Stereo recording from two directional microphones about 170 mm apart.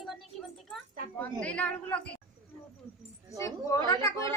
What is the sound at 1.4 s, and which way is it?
Speech, 10° left (ahead or behind).